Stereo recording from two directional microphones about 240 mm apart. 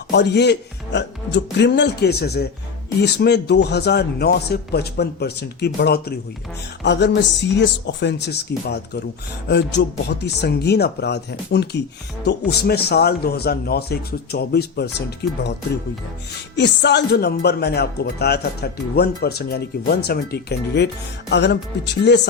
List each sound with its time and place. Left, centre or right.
0.1 s a man's voice: left
16.6 s speech: left